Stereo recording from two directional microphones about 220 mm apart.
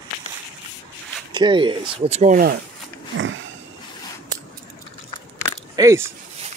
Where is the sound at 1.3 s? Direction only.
20° right (ahead or behind); by 2.5 s 35° right (ahead or behind).